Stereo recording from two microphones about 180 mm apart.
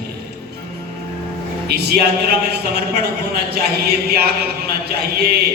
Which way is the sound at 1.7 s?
60° right (ahead or behind).